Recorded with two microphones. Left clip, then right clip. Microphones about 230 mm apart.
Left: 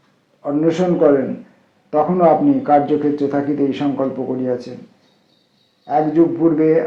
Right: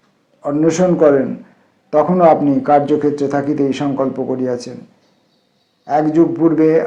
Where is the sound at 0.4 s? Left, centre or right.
Right.